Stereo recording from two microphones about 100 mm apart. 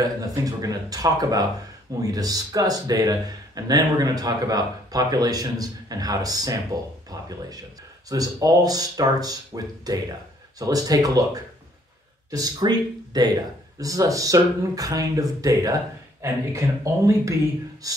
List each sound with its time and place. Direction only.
0.0 s speech: 40° right (ahead or behind)
12.3 s speech: 40° right (ahead or behind)